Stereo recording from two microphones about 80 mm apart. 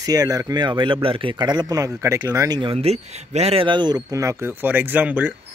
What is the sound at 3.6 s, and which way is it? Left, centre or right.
Speech, right.